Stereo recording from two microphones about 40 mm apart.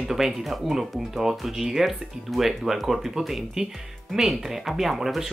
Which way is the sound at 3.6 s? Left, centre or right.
Centre.